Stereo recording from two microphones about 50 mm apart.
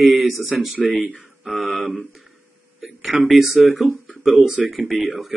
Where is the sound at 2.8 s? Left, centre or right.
Centre.